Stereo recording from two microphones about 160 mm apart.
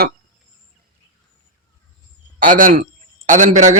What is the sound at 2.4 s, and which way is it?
A man's voice, 55° right (ahead or behind).